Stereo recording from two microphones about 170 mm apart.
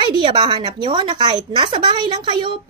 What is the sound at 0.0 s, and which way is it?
A woman's voice, 30° right (ahead or behind).